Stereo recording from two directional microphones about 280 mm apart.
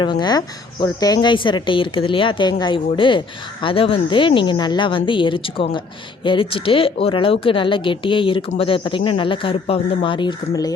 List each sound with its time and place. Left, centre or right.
0.0 s speech: centre